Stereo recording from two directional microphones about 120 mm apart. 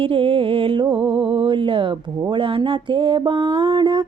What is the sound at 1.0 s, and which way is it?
Mantra, 45° right (ahead or behind).